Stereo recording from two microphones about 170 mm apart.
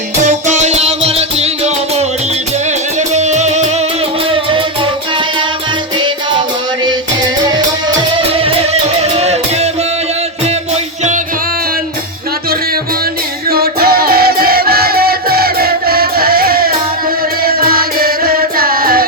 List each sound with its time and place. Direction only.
0.2 s music: 45° right (ahead or behind)
3.1 s music: 40° right (ahead or behind)
8.1 s music: 35° right (ahead or behind)
13.5 s music: 65° right (ahead or behind)